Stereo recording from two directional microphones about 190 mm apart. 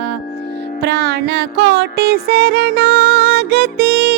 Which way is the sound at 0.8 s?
60° right (ahead or behind).